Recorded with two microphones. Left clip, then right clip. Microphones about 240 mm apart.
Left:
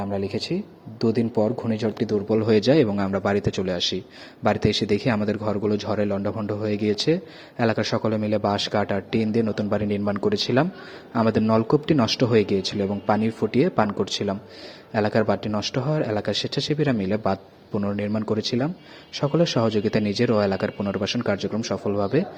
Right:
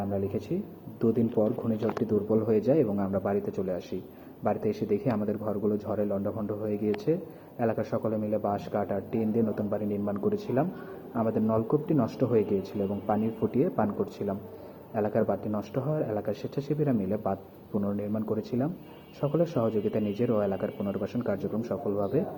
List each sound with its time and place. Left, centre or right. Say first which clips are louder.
1.0 s speech: left 4 dB; left